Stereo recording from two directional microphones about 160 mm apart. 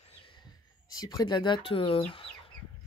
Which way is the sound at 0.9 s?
25° left (ahead or behind).